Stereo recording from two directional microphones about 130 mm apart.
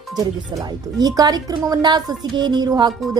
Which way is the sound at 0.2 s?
30° right (ahead or behind).